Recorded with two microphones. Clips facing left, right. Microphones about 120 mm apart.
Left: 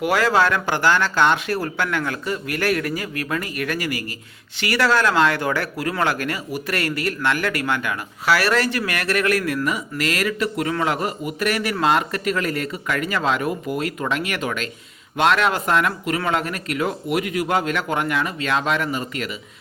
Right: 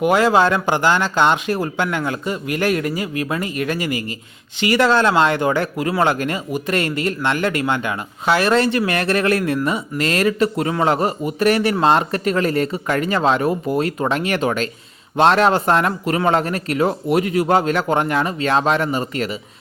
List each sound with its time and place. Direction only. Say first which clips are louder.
0.0 s speech: right 4 dB; 20° right (ahead or behind)